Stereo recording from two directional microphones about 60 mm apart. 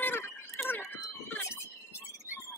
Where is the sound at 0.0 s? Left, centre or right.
Left.